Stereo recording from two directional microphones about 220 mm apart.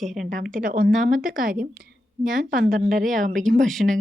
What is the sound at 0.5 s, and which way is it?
A woman's voice, 40° right (ahead or behind).